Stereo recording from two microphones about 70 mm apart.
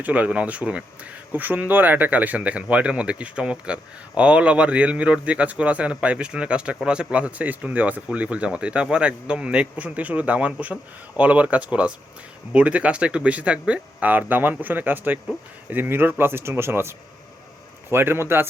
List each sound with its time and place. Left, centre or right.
0.0 s speech: centre; by 18.4 s right